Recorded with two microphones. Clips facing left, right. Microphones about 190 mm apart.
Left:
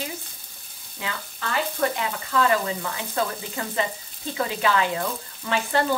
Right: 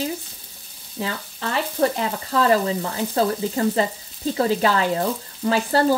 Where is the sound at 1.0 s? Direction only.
30° right (ahead or behind).